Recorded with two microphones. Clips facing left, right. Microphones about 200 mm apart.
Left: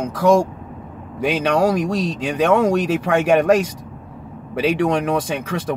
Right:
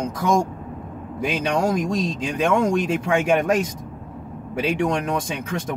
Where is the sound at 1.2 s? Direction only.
65° left (ahead or behind); by 3.6 s 90° left.